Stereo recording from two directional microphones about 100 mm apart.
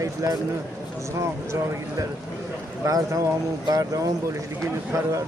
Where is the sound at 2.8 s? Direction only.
35° right (ahead or behind).